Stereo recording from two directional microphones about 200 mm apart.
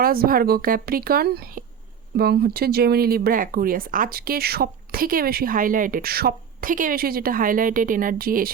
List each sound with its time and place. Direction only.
0.0 s speech: 45° right (ahead or behind)